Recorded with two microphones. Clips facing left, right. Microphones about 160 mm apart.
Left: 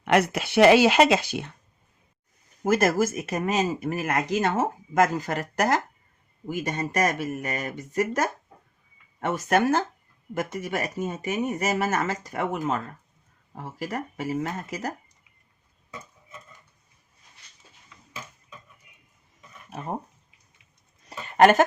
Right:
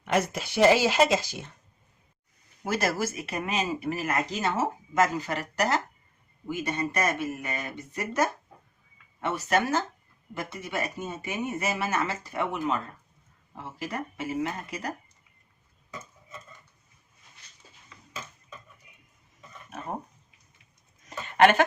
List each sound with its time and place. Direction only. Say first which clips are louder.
0.0 s speech: left 5 dB; 70° left (ahead or behind)
2.6 s speech: left 6 dB; 50° left (ahead or behind)
9.2 s speech: left 4 dB; 50° left (ahead or behind)
21.1 s a sound: left 3 dB; 40° left (ahead or behind)